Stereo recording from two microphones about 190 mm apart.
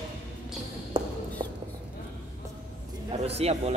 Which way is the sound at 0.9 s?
30° right (ahead or behind).